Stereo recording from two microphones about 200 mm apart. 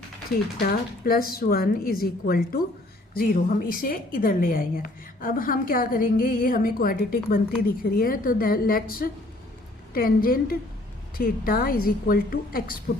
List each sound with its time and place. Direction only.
0.6 s a woman's voice: 45° left (ahead or behind)